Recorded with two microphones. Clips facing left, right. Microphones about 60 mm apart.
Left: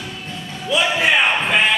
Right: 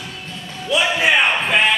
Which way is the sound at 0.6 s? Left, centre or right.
Centre.